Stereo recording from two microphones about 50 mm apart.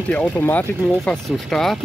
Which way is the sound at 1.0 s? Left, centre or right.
Centre.